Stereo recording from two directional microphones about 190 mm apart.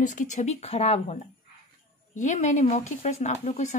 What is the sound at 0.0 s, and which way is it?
Speech, 40° left (ahead or behind).